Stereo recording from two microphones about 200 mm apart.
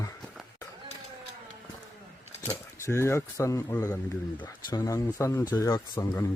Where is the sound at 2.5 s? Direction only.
15° left (ahead or behind).